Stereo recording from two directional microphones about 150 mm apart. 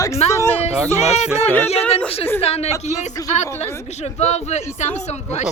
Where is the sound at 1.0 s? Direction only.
45° left (ahead or behind).